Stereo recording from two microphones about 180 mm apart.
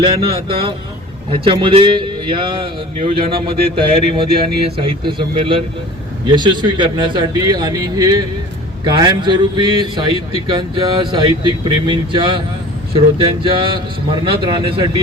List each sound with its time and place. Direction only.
0.0 s a man's voice: 30° right (ahead or behind)